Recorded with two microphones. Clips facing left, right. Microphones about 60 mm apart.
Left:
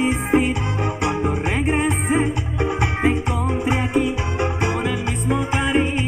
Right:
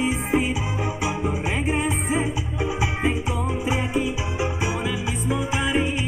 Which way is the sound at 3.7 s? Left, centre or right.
Centre.